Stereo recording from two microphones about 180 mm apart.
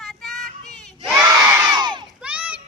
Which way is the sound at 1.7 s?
25° right (ahead or behind).